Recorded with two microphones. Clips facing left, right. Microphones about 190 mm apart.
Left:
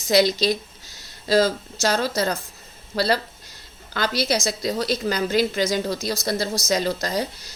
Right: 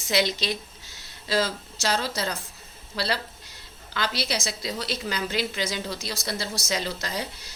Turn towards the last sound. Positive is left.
turn(degrees=40)  # may be behind; listen again after turning